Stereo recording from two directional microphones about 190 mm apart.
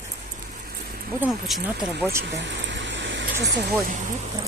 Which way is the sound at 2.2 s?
65° right (ahead or behind).